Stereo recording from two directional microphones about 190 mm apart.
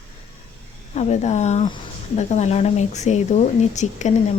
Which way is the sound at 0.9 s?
35° left (ahead or behind).